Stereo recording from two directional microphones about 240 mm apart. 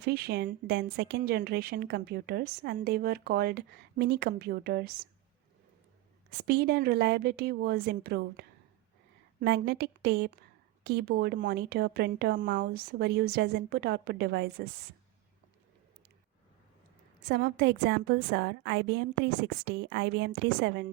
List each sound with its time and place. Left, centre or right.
0.0 s a woman's voice: right
6.5 s a woman's voice: right
17.2 s a woman's voice: right